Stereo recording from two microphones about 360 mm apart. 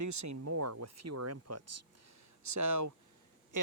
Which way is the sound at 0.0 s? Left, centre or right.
Right.